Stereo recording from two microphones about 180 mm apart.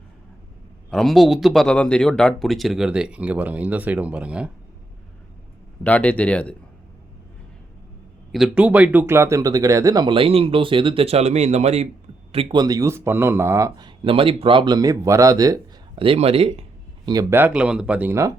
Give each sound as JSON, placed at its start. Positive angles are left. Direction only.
{"t": 0.9, "sound": "speech", "side_deg": 0}
{"t": 5.8, "sound": "speech", "side_deg": 10}
{"t": 8.3, "sound": "speech", "side_deg": -5}
{"t": 16.0, "sound": "speech", "side_deg": -30}
{"t": 17.1, "sound": "speech", "side_deg": -20}